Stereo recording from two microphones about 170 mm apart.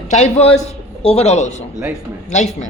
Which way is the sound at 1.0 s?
35° left (ahead or behind).